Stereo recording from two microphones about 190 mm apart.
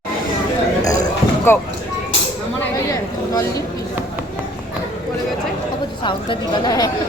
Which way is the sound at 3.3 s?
20° left (ahead or behind).